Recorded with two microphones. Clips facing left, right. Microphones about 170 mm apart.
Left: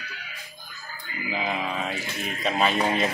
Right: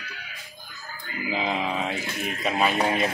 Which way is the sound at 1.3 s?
20° right (ahead or behind).